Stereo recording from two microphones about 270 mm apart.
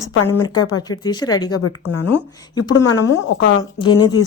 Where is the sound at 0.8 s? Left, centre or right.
Centre.